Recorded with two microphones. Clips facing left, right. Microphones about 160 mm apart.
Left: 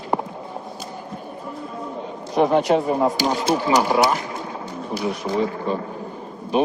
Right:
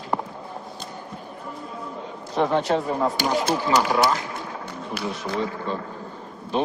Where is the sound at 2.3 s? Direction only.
15° left (ahead or behind).